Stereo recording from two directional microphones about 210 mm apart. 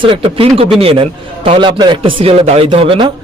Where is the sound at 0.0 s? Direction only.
25° right (ahead or behind).